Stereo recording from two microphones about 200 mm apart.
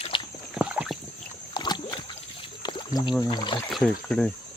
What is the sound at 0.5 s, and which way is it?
Rowboat, 5° right (ahead or behind).